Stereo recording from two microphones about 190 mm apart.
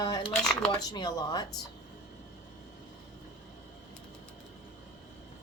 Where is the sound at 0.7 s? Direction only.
20° left (ahead or behind).